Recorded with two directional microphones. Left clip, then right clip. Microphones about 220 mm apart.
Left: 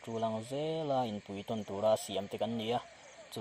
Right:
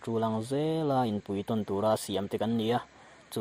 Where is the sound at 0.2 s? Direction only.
25° right (ahead or behind).